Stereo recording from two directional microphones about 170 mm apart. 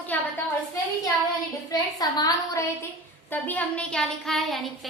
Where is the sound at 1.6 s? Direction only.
20° left (ahead or behind).